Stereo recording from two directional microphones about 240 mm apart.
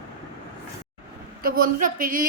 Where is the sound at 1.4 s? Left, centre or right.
Right.